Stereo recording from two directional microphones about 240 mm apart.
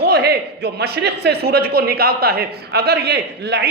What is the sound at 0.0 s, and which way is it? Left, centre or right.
A man's voice, right.